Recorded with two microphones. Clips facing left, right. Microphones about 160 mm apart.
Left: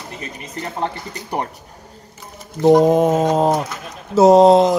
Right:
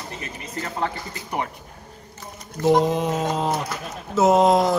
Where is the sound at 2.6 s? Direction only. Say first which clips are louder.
Left 7 dB; 50° left (ahead or behind).